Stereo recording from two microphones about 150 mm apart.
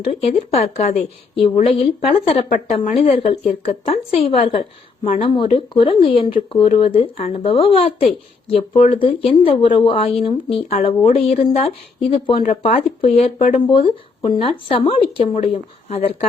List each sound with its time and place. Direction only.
0.0 s speech: 45° left (ahead or behind)